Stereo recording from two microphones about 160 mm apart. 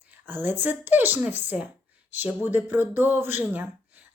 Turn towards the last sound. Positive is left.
turn(degrees=-10)  # may be behind; listen again after turning